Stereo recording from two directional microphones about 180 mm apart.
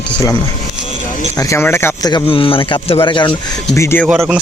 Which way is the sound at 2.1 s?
30° left (ahead or behind).